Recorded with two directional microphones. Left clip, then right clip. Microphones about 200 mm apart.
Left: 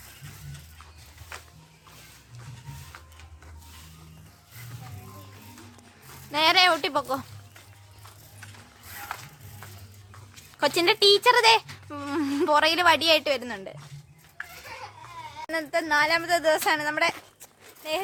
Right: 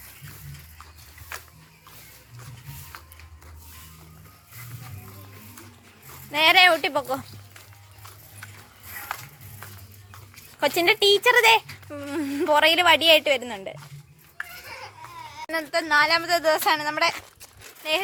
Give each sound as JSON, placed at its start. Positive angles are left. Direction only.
{"t": 1.3, "sound": "a sound", "side_deg": -60}
{"t": 6.3, "sound": "a woman's voice", "side_deg": 0}
{"t": 10.6, "sound": "speech", "side_deg": 10}
{"t": 12.5, "sound": "a woman's voice", "side_deg": 5}
{"t": 15.4, "sound": "speech", "side_deg": 15}
{"t": 17.8, "sound": "a woman's voice", "side_deg": -5}